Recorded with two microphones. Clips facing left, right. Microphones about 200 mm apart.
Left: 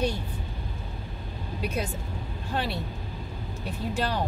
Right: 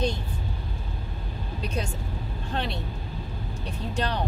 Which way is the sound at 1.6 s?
5° left (ahead or behind).